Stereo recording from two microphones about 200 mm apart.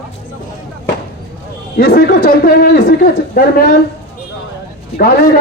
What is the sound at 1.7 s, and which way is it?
A man's voice, 45° left (ahead or behind).